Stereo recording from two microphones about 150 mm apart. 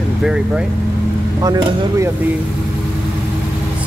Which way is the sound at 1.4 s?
25° right (ahead or behind).